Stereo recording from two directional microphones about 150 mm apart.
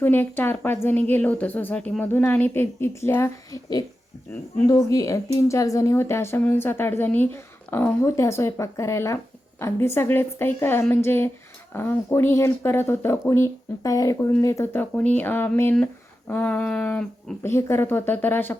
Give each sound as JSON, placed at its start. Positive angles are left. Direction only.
{"t": 0.0, "sound": "a woman's voice", "side_deg": 15}